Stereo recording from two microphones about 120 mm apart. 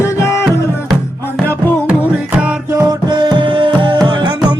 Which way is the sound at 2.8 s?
35° right (ahead or behind).